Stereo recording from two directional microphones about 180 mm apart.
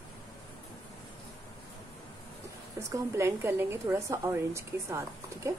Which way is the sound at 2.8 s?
15° right (ahead or behind).